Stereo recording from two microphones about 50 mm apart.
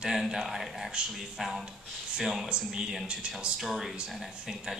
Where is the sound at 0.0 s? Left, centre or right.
Centre.